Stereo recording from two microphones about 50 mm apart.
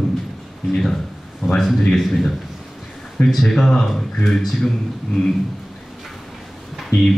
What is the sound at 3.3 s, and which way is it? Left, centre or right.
A man's voice, centre.